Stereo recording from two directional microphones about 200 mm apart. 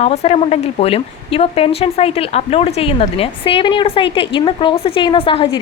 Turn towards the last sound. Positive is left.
turn(degrees=25)  # may be behind; listen again after turning